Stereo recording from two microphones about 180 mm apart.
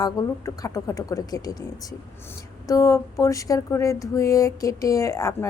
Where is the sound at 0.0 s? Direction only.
20° left (ahead or behind).